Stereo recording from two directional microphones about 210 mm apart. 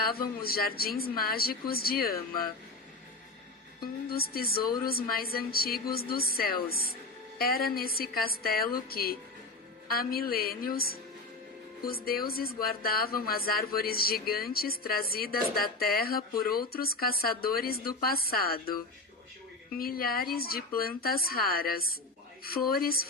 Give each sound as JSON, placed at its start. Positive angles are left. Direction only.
{"t": 0.1, "sound": "speech", "side_deg": 45}
{"t": 4.1, "sound": "speech", "side_deg": 45}
{"t": 19.8, "sound": "speech", "side_deg": 45}